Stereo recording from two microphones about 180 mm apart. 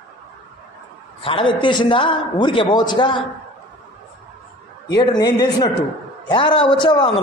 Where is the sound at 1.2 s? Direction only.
30° left (ahead or behind).